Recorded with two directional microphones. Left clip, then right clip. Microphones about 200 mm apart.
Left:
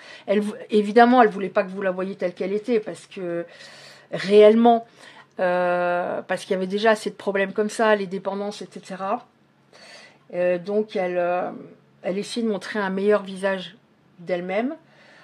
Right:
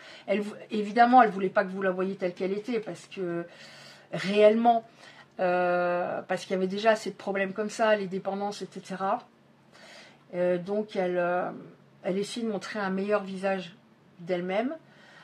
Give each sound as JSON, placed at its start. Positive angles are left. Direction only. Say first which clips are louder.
{"t": 0.0, "sound": "speech", "louder": "left 7 dB", "side_deg": 40}
{"t": 10.3, "sound": "speech", "louder": "left 6 dB", "side_deg": 35}